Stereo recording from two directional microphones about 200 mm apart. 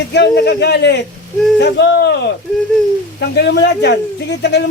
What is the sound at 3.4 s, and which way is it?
Speech, 55° left (ahead or behind).